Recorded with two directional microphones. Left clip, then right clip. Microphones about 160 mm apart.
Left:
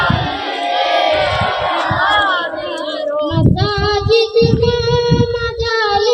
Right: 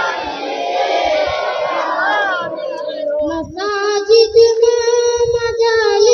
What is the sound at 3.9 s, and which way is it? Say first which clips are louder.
Child singing: right 3 dB; 5° right (ahead or behind).